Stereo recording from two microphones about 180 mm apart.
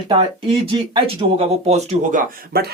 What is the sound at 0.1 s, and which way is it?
Speech, 30° right (ahead or behind).